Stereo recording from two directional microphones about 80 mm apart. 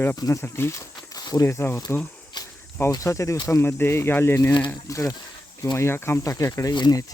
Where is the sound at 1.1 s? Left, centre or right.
Left.